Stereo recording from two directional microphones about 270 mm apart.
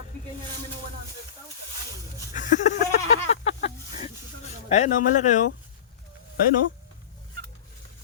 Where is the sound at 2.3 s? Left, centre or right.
Left.